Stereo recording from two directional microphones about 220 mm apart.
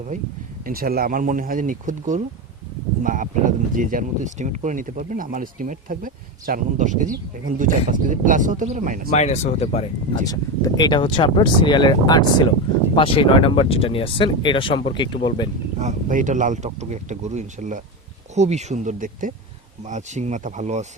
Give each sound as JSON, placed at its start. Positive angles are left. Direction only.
{"t": 0.6, "sound": "speech", "side_deg": -40}
{"t": 9.1, "sound": "speech", "side_deg": 30}
{"t": 10.2, "sound": "speech", "side_deg": 15}
{"t": 15.8, "sound": "speech", "side_deg": -35}